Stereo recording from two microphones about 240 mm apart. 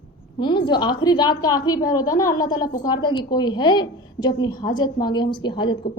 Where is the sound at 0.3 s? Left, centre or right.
Centre.